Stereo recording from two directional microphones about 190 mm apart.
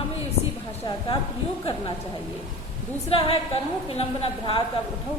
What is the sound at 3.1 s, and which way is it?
A woman's voice, 30° left (ahead or behind).